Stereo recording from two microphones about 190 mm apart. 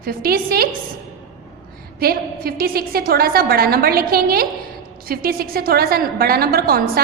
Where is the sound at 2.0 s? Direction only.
50° right (ahead or behind).